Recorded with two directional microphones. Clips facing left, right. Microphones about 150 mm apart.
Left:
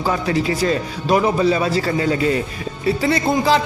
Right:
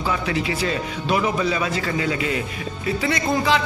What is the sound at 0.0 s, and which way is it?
A man's voice, 40° left (ahead or behind).